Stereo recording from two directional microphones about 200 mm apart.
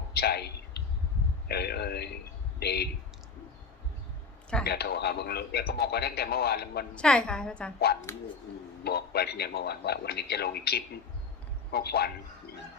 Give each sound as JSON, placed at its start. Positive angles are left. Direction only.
{"t": 0.1, "sound": "a sound", "side_deg": 50}
{"t": 1.5, "sound": "a man's voice", "side_deg": 55}
{"t": 4.6, "sound": "a man's voice", "side_deg": 55}
{"t": 6.9, "sound": "a woman's voice", "side_deg": 5}
{"t": 8.8, "sound": "a man's voice", "side_deg": 50}